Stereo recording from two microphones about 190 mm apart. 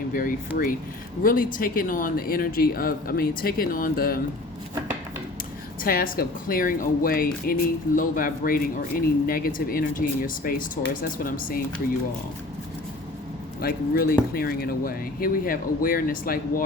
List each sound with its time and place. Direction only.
0.1 s speech: 50° left (ahead or behind)
5.8 s speech: 50° left (ahead or behind)
13.6 s speech: 50° left (ahead or behind)